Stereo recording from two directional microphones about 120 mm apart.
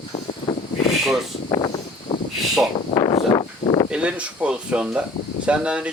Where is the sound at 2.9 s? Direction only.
40° left (ahead or behind).